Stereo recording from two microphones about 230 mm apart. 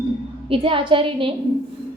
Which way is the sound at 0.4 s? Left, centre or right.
Right.